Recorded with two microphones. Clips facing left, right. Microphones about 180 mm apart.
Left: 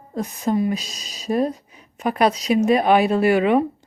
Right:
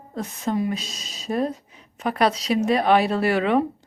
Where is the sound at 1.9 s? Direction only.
15° left (ahead or behind).